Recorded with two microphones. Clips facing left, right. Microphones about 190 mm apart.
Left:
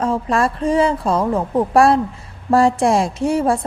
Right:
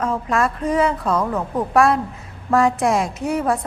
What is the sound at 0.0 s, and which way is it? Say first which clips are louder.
A woman's voice: left 2 dB; 30° left (ahead or behind).